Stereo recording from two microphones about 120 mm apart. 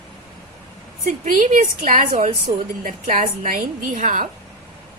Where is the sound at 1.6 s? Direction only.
90° right.